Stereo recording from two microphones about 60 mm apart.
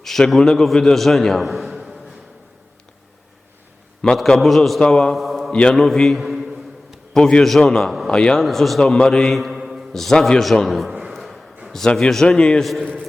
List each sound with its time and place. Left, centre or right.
0.0 s a man's voice: centre
4.0 s a man's voice: centre
5.5 s mantra: centre
5.7 s a sound: centre
7.1 s a man's voice: centre
7.8 s a man's voice: centre
8.1 s a man's voice: centre
8.4 s a man's voice: centre
9.4 s mantra: centre
9.9 s a man's voice: centre
11.1 s a sound: centre
11.9 s a man's voice: centre